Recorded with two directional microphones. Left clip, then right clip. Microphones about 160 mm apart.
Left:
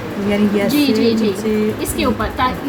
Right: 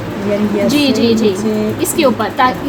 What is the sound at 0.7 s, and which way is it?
A woman's voice, 40° right (ahead or behind).